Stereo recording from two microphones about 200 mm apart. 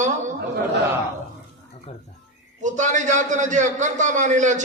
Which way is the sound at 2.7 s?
40° right (ahead or behind).